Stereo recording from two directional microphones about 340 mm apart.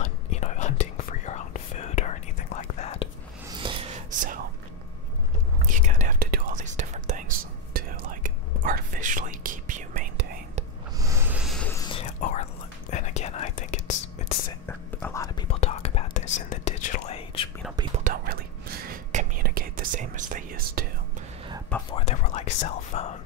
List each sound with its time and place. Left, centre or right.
0.0 s whispering: left
3.5 s whispering: centre
5.7 s whispering: right
11.0 s a sound: centre
11.8 s whispering: centre
14.7 s whispering: centre
17.7 s whispering: right
21.9 s whispering: centre